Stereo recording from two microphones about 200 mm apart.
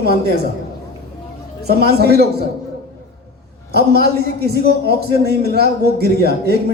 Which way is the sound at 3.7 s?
50° right (ahead or behind).